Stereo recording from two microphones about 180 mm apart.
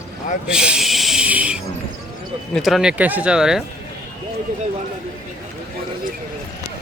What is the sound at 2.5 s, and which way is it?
Speech, centre (ahead or behind).